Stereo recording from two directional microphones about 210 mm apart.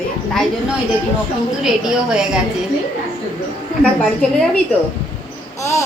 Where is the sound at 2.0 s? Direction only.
5° right (ahead or behind).